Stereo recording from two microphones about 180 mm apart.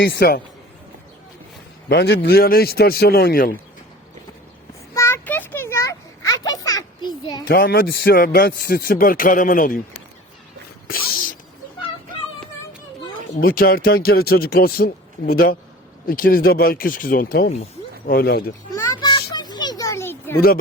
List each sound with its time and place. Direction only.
0.0 s speech: 60° left (ahead or behind)
1.9 s speech: 65° left (ahead or behind)
4.9 s a sound: 15° left (ahead or behind)
7.4 s speech: 55° left (ahead or behind)
13.4 s speech: 55° left (ahead or behind)
18.7 s a sound: 20° left (ahead or behind)